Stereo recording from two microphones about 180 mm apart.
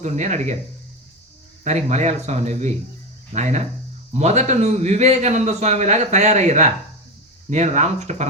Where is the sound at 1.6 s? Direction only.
40° right (ahead or behind).